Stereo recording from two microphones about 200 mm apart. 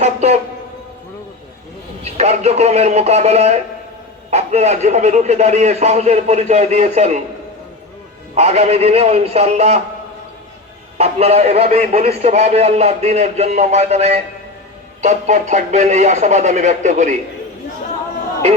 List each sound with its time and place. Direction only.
0.0 s music: 30° right (ahead or behind)
2.0 s a man's voice: 30° right (ahead or behind)
8.4 s a man's voice: 30° right (ahead or behind)
10.9 s a man's voice: 30° right (ahead or behind)